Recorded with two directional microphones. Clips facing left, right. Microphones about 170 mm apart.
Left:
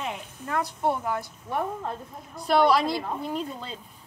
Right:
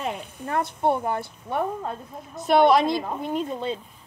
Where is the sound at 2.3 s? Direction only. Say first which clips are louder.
Right 3 dB; 20° right (ahead or behind).